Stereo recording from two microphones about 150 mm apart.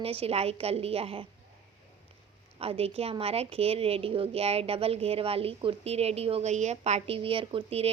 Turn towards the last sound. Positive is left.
turn(degrees=-40)  # may be behind; listen again after turning